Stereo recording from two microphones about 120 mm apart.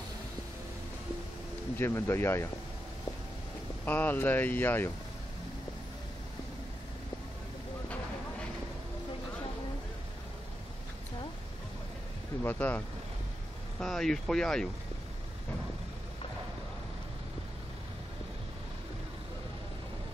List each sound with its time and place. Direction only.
1.8 s speech: 20° left (ahead or behind)
3.8 s speech: 15° left (ahead or behind)
12.4 s speech: 15° left (ahead or behind)
13.7 s speech: 5° left (ahead or behind)